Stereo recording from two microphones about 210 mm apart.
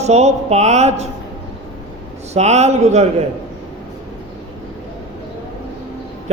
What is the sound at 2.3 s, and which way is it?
Speech, 30° right (ahead or behind).